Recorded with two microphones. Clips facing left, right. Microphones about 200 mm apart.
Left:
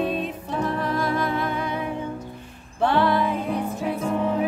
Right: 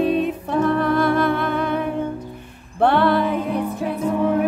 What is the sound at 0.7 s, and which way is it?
Music, 60° right (ahead or behind).